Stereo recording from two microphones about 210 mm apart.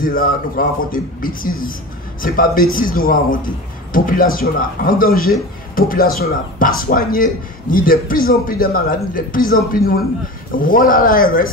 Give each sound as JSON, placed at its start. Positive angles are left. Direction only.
{"t": 0.0, "sound": "a man's voice", "side_deg": 40}